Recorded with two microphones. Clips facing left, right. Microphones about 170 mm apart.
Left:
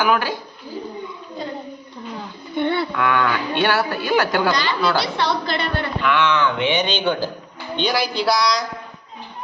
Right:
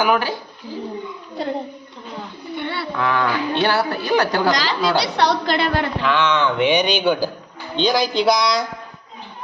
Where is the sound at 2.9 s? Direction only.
30° right (ahead or behind).